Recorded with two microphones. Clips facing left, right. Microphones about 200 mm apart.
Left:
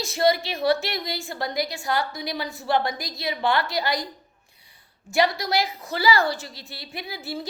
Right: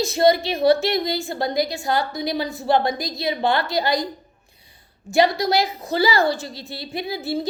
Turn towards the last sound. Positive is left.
turn(degrees=-25)  # may be behind; listen again after turning